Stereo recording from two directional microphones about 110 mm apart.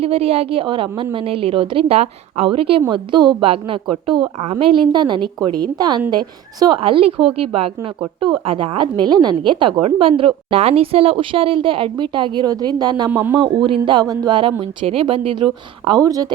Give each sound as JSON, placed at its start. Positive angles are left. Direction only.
{"t": 0.0, "sound": "speech", "side_deg": -65}
{"t": 2.0, "sound": "a woman's voice", "side_deg": -80}
{"t": 2.5, "sound": "speech", "side_deg": -55}
{"t": 2.9, "sound": "a woman's voice", "side_deg": -45}
{"t": 6.7, "sound": "a woman's voice", "side_deg": -60}
{"t": 9.0, "sound": "a woman's voice", "side_deg": -40}
{"t": 14.0, "sound": "music", "side_deg": -35}
{"t": 14.6, "sound": "a woman's voice", "side_deg": -55}
{"t": 16.0, "sound": "music", "side_deg": -35}